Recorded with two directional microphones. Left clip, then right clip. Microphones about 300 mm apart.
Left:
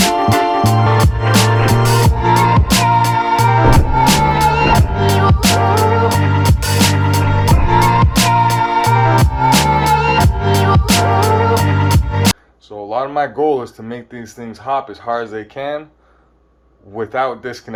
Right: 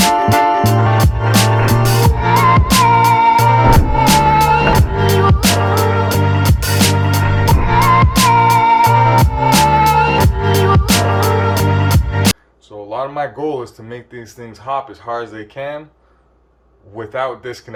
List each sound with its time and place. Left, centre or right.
0.0 s music: centre
12.9 s a sound: centre
14.7 s speech: centre
17.1 s speech: centre